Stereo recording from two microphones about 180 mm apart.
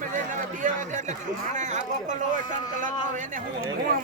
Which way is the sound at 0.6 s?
45° right (ahead or behind).